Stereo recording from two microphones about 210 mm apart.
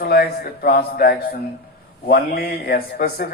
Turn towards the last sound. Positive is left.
turn(degrees=45)  # may be behind; listen again after turning